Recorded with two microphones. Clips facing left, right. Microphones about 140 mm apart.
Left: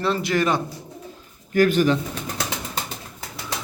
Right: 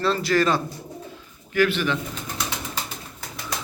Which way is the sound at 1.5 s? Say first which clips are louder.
Left 4 dB; 45° left (ahead or behind).